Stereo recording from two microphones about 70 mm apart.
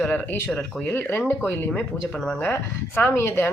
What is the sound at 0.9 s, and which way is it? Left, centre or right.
Speech, left.